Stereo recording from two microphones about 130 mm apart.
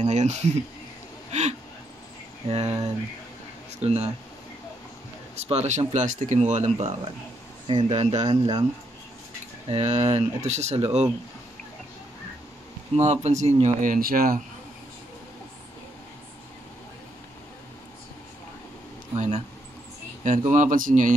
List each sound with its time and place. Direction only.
0.0 s speech: 60° right (ahead or behind)
2.4 s speech: 55° right (ahead or behind)
5.3 s speech: 55° right (ahead or behind)
7.6 s speech: 50° right (ahead or behind)
9.7 s speech: 55° right (ahead or behind)
12.9 s speech: 55° right (ahead or behind); by 14.4 s 90° right
19.1 s speech: 60° right (ahead or behind)
20.2 s speech: 75° right (ahead or behind); by 21.1 s 90° right